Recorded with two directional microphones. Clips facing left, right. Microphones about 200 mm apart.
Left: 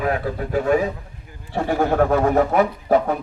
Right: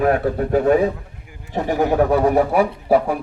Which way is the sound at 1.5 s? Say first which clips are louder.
Right 1 dB; 15° right (ahead or behind).